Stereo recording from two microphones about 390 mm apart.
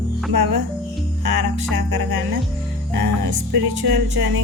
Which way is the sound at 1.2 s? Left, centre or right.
Right.